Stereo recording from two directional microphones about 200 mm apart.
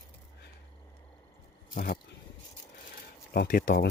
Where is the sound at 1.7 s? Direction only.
45° left (ahead or behind).